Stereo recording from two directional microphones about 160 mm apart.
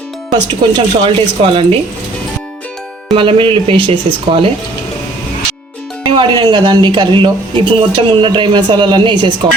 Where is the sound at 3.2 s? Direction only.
35° right (ahead or behind).